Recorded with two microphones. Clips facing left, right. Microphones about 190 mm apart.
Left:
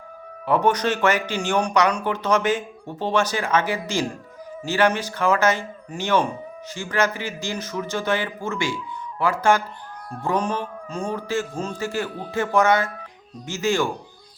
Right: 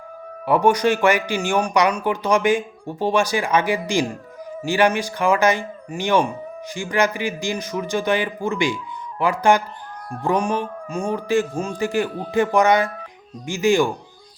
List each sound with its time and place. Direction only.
0.4 s speech: 10° right (ahead or behind)